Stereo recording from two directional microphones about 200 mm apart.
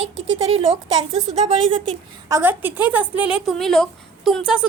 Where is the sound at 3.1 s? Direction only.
25° left (ahead or behind).